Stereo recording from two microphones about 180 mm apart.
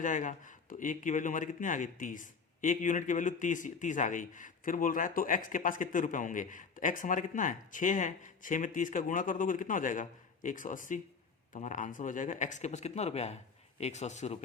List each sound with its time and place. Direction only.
0.0 s speech: 45° left (ahead or behind)